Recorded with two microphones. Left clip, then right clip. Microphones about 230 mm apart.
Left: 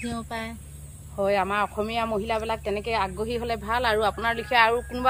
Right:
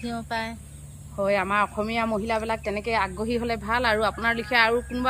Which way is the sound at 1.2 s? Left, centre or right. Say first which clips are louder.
Right 1 dB; left.